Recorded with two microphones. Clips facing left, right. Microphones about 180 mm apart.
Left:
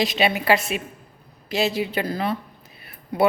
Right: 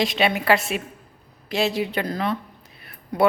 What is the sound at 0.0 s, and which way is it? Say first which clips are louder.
A man's voice: even; centre (ahead or behind).